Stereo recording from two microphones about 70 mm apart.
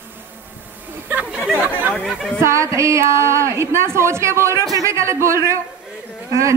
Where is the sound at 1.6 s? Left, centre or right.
Right.